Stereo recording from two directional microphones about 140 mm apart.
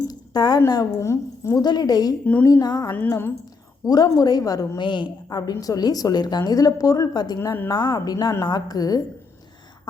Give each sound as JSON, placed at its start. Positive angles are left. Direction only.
{"t": 0.1, "sound": "a sound", "side_deg": 30}
{"t": 0.7, "sound": "a woman's voice", "side_deg": 25}
{"t": 3.1, "sound": "speech", "side_deg": 15}
{"t": 3.8, "sound": "a woman's voice", "side_deg": 30}
{"t": 7.7, "sound": "a woman's voice", "side_deg": 25}